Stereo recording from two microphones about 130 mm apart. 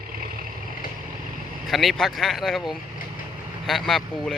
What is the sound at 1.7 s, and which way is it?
Speech, centre (ahead or behind).